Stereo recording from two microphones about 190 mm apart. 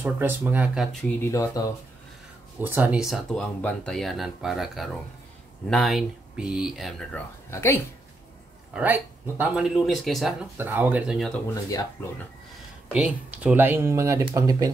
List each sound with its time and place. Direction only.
0.0 s speech: 10° right (ahead or behind)
1.0 s speech: 15° left (ahead or behind)
2.6 s speech: 10° right (ahead or behind)
7.5 s speech: 15° left (ahead or behind)
8.7 s speech: 10° right (ahead or behind)
10.6 s speech: 10° right (ahead or behind)
12.0 s speech: 10° left (ahead or behind)
12.9 s speech: 5° right (ahead or behind)